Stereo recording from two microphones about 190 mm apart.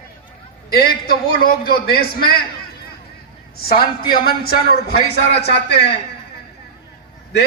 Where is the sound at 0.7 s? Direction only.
55° left (ahead or behind).